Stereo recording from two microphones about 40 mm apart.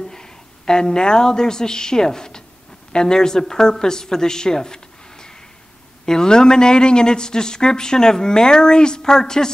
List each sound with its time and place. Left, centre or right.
0.0 s a woman's voice: centre